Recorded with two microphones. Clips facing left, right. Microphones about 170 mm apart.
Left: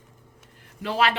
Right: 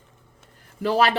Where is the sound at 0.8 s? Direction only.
40° right (ahead or behind).